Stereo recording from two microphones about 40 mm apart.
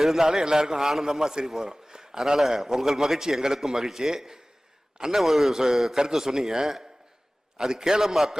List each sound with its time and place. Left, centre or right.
0.0 s a man's voice: centre